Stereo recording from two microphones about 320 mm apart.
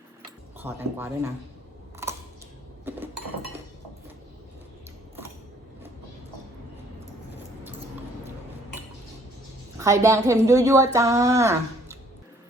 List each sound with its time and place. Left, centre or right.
0.6 s speech: centre
2.0 s scissors: centre
9.7 s speech: centre